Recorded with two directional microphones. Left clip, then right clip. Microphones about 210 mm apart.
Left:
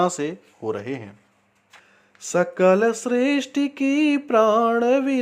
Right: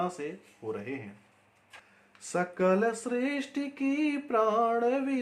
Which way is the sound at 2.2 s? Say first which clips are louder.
Left 10 dB; 30° left (ahead or behind).